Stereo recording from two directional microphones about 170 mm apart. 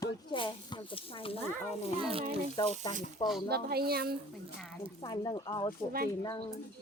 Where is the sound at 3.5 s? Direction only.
70° right (ahead or behind).